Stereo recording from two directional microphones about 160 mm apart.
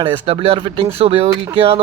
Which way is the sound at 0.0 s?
35° right (ahead or behind).